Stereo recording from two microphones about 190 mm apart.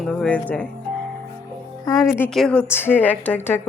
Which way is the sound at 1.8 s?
20° left (ahead or behind).